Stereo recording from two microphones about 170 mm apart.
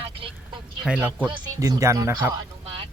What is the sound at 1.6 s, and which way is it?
Speech, 20° right (ahead or behind).